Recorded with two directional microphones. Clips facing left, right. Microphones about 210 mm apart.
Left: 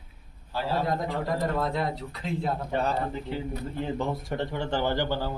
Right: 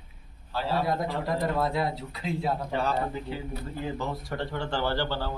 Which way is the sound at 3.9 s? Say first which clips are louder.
Left 3 dB; 25° left (ahead or behind).